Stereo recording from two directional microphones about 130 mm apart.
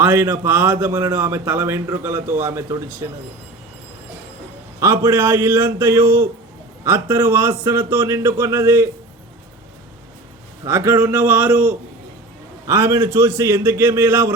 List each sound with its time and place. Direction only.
0.0 s a man's voice: 15° right (ahead or behind)
4.8 s a man's voice: 20° right (ahead or behind)
10.7 s a man's voice: 20° right (ahead or behind)
12.6 s a man's voice: 20° right (ahead or behind)